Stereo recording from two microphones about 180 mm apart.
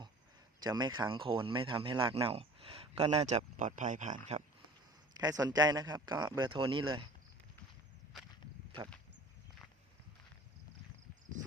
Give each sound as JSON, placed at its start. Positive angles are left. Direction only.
{"t": 0.6, "sound": "speech", "side_deg": -25}
{"t": 5.1, "sound": "a man's voice", "side_deg": -20}